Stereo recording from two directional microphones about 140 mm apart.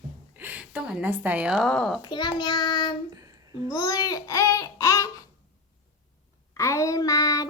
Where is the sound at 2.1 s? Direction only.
30° left (ahead or behind).